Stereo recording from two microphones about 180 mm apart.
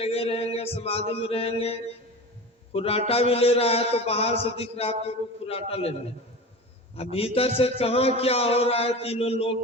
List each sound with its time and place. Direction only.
0.0 s mantra: 35° left (ahead or behind)
2.7 s a man's voice: 35° left (ahead or behind)
6.9 s a man's voice: 35° left (ahead or behind)